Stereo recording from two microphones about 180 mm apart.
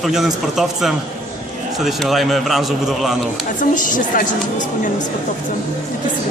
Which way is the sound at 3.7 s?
45° left (ahead or behind).